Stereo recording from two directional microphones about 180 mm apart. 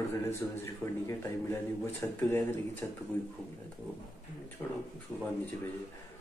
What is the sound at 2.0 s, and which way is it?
Speech, 10° left (ahead or behind).